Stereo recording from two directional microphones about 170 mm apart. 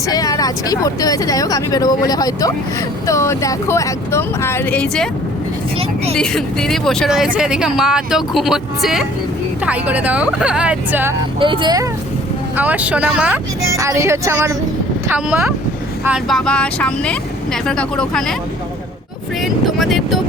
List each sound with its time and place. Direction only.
0.1 s speech: 20° left (ahead or behind)
6.1 s speech: 5° left (ahead or behind)
11.3 s speech: 30° right (ahead or behind)
12.5 s speech: 10° right (ahead or behind)
13.7 s speech: 15° right (ahead or behind); by 18.3 s 5° left (ahead or behind)
19.4 s speech: centre (ahead or behind)